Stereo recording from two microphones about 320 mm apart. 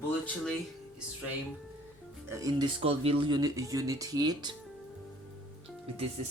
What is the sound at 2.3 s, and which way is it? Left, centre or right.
Speech, centre.